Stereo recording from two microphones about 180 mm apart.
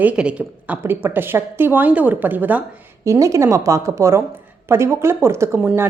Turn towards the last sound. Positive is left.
turn(degrees=-15)  # may be behind; listen again after turning